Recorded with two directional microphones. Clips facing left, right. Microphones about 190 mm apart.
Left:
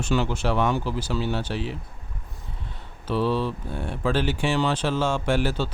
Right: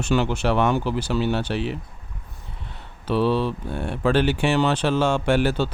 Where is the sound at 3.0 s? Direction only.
70° right (ahead or behind).